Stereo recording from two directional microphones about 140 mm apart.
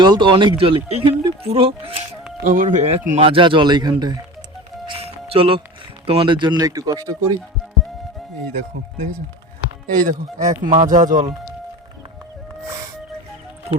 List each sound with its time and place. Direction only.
0.0 s speech: 35° right (ahead or behind)
2.4 s speech: 70° right (ahead or behind)
3.2 s speech: 40° right (ahead or behind)
4.9 s music: 45° right (ahead or behind)
6.1 s speech: 35° right (ahead or behind)
10.0 s speech: 70° right (ahead or behind)